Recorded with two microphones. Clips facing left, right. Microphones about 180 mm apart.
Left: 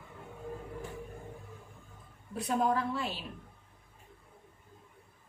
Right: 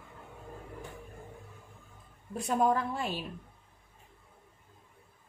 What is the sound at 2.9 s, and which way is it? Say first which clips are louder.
Speech: right 2 dB; 50° right (ahead or behind).